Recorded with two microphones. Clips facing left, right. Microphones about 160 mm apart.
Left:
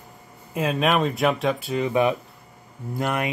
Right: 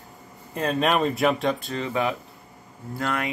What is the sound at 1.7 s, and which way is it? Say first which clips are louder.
Speech: left 5 dB; 15° left (ahead or behind).